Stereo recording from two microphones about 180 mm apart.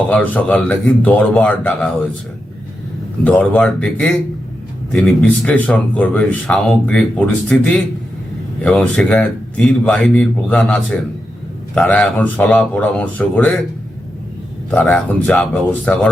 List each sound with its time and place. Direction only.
0.1 s speech: 10° left (ahead or behind)
3.2 s speech: 10° left (ahead or behind)
14.7 s speech: 5° left (ahead or behind)